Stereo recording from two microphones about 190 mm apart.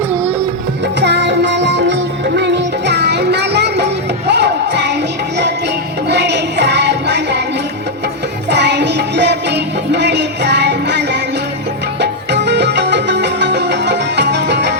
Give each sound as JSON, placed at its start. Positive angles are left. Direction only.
{"t": 1.0, "sound": "music", "side_deg": -65}
{"t": 6.1, "sound": "music", "side_deg": -65}
{"t": 8.4, "sound": "music", "side_deg": -65}